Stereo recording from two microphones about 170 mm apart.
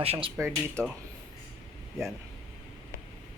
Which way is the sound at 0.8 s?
5° left (ahead or behind).